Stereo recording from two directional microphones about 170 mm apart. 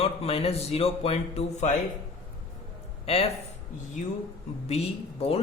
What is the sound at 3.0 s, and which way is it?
Speech, 35° left (ahead or behind).